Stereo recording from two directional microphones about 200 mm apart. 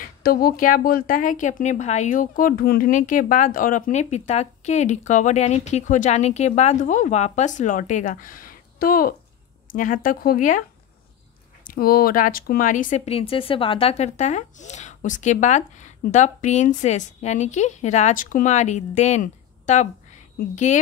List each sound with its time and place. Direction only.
0.2 s a woman's voice: 50° left (ahead or behind)
11.6 s a woman's voice: 45° left (ahead or behind)